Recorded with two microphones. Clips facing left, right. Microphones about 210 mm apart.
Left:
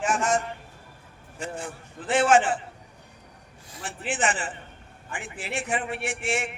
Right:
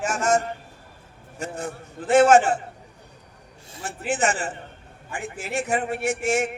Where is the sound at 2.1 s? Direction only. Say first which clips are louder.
Right 5 dB; 40° right (ahead or behind).